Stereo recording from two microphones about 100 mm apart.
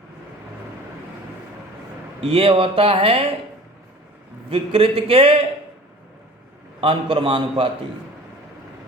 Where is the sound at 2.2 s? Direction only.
75° right (ahead or behind).